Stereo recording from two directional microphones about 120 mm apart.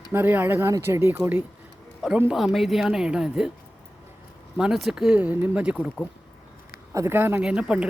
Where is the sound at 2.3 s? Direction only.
Centre (ahead or behind).